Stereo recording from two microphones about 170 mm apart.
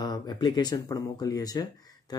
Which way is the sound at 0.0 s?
25° left (ahead or behind).